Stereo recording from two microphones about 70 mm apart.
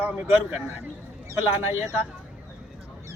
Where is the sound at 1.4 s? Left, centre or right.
Right.